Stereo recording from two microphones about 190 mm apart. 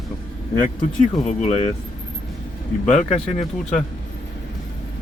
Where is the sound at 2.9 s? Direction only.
35° left (ahead or behind).